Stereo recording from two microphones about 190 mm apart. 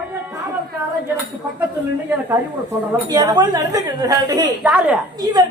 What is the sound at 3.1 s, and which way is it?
A woman's voice, 20° right (ahead or behind).